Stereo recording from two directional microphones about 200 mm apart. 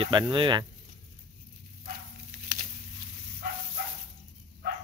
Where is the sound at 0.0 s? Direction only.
25° right (ahead or behind).